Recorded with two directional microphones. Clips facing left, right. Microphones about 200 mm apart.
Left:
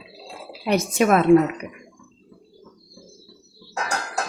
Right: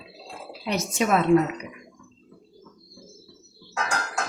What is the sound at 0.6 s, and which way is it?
Speech, 55° left (ahead or behind).